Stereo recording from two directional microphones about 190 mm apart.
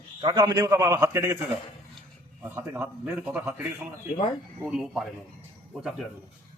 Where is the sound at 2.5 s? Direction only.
10° right (ahead or behind).